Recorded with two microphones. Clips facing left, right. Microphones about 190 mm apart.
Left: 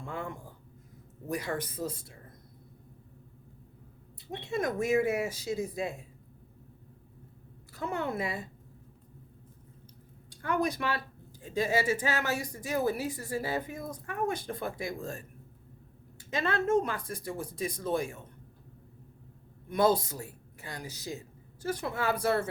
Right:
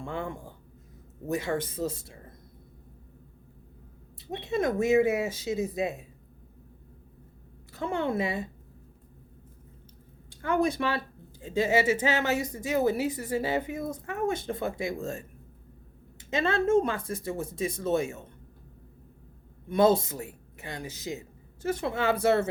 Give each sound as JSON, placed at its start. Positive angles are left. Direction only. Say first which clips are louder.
{"t": 0.0, "sound": "speech", "louder": "right 4 dB", "side_deg": -30}
{"t": 4.3, "sound": "speech", "louder": "right 4 dB", "side_deg": -20}
{"t": 7.7, "sound": "speech", "louder": "right 4 dB", "side_deg": -25}
{"t": 10.2, "sound": "speech", "louder": "right 4 dB", "side_deg": -25}
{"t": 19.6, "sound": "speech", "louder": "right 4 dB", "side_deg": -25}